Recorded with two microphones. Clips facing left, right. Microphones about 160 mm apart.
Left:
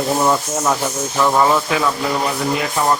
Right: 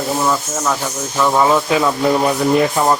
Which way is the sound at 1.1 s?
Centre (ahead or behind).